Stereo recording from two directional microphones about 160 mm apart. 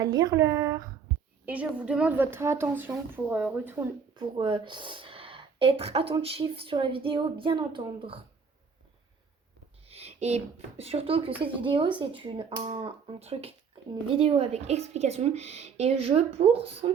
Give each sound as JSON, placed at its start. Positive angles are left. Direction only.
{"t": 0.0, "sound": "a woman's voice", "side_deg": -25}
{"t": 1.5, "sound": "a woman's voice", "side_deg": -10}
{"t": 4.1, "sound": "speech", "side_deg": -30}
{"t": 9.8, "sound": "speech", "side_deg": -40}